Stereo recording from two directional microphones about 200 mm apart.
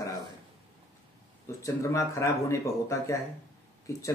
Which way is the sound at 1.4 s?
15° left (ahead or behind).